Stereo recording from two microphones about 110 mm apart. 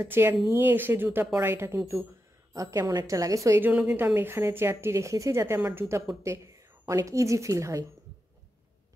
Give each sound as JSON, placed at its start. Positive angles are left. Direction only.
{"t": 0.0, "sound": "a woman's voice", "side_deg": -20}